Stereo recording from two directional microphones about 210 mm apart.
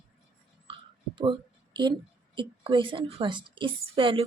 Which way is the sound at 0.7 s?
25° right (ahead or behind).